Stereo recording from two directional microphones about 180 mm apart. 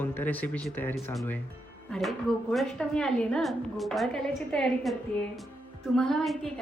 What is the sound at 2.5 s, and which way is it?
A woman's voice, 5° left (ahead or behind).